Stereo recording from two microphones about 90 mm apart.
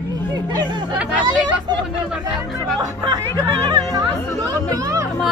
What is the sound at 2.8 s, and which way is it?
Speech, 45° right (ahead or behind).